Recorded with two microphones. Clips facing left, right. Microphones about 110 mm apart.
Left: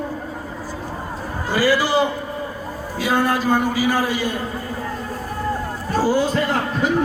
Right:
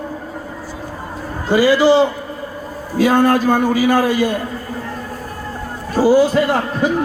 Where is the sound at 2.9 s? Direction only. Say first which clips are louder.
Right 7 dB; 50° right (ahead or behind).